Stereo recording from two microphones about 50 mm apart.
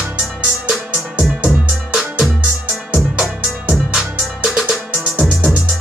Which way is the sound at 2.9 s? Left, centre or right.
Right.